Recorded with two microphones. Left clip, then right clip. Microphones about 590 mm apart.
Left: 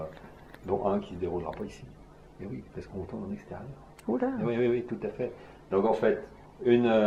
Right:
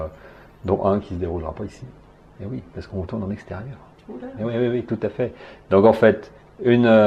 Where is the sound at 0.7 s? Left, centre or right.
Right.